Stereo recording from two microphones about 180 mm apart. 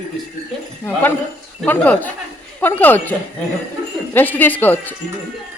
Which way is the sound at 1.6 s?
10° left (ahead or behind).